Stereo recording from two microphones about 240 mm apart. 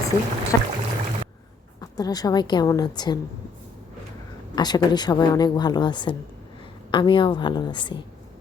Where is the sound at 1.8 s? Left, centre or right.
Centre.